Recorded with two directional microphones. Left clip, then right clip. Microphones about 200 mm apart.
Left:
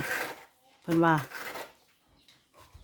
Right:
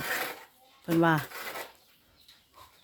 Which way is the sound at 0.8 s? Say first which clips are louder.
Even; 5° left (ahead or behind).